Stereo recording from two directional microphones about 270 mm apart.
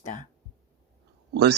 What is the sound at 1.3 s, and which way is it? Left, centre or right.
Speech, right.